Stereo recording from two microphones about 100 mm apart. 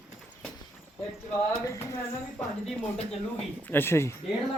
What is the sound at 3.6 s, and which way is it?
Speech, 20° left (ahead or behind).